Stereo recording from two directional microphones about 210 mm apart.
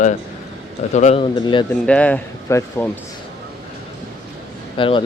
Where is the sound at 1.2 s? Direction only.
20° left (ahead or behind).